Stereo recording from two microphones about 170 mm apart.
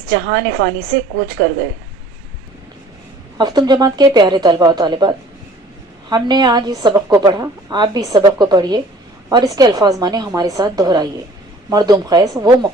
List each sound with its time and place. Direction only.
0.1 s a woman's voice: 90° right
3.3 s a woman's voice: 25° right (ahead or behind)